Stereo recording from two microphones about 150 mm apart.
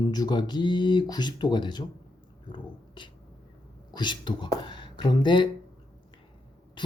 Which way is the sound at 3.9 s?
30° left (ahead or behind).